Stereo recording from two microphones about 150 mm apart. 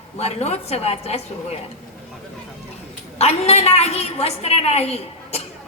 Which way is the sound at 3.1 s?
45° left (ahead or behind).